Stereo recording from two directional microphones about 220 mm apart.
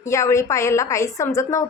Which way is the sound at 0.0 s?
15° left (ahead or behind).